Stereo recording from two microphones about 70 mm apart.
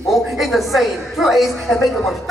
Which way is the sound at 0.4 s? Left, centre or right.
Centre.